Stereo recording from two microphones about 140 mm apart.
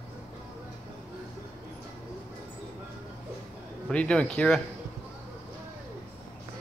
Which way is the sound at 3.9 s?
10° left (ahead or behind).